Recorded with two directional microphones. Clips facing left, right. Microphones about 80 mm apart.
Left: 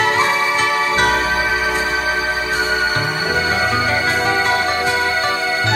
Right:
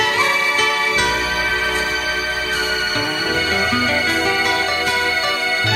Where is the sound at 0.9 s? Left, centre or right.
Left.